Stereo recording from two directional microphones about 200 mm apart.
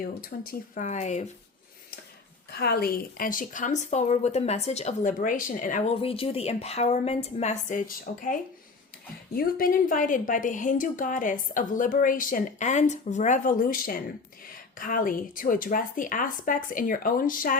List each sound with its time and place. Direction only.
0.0 s a woman's voice: 45° left (ahead or behind)
2.5 s a woman's voice: 55° left (ahead or behind)
6.0 s a woman's voice: 30° left (ahead or behind); by 17.6 s 45° left (ahead or behind)